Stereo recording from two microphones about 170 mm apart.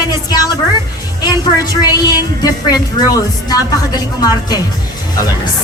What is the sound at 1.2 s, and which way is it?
A woman's voice, 25° left (ahead or behind).